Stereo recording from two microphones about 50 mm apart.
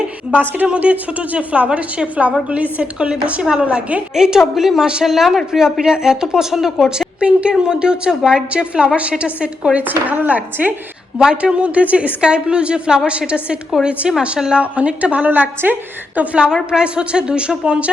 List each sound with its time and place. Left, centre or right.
0.3 s a woman's voice: right
4.1 s a woman's voice: centre
7.2 s a woman's voice: right
9.7 s speech: right
11.2 s a woman's voice: centre
11.6 s a woman's voice: right
16.7 s a woman's voice: centre